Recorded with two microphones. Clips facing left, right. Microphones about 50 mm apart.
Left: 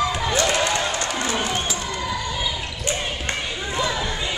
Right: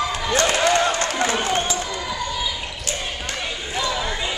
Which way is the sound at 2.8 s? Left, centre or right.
Left.